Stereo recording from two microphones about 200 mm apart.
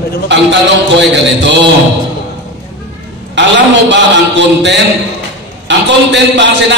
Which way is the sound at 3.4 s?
65° right (ahead or behind).